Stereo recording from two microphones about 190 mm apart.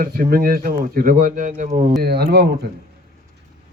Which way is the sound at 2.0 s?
55° right (ahead or behind).